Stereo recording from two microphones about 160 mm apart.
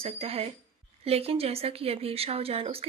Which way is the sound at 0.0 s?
35° right (ahead or behind).